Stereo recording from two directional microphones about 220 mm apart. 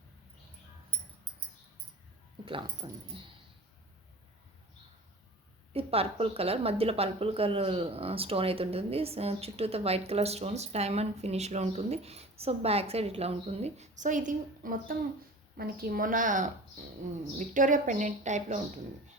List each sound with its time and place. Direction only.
2.4 s speech: 20° right (ahead or behind)
5.7 s a woman's voice: 25° right (ahead or behind)